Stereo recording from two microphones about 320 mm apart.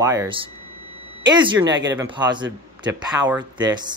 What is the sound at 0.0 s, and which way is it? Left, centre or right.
Speech, centre.